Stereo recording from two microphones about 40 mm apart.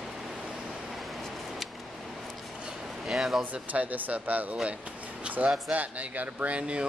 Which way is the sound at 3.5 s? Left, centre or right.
Right.